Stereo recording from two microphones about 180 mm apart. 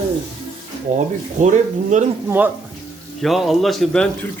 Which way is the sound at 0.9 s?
40° right (ahead or behind).